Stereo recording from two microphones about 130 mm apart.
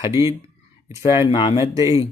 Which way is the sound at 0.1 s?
25° right (ahead or behind).